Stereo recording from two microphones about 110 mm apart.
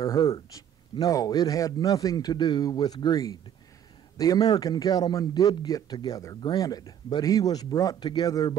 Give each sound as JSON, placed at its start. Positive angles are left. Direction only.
{"t": 0.0, "sound": "a man's voice", "side_deg": 35}